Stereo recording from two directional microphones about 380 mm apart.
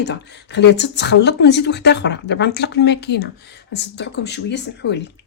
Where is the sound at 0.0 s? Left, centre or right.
Left.